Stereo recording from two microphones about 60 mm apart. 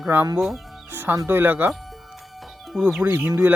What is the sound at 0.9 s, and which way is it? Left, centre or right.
Music, right.